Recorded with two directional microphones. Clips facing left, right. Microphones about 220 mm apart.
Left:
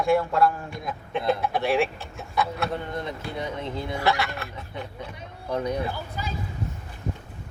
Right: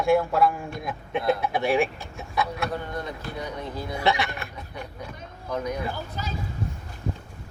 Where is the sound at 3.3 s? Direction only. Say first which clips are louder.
Left 3 dB; 25° left (ahead or behind).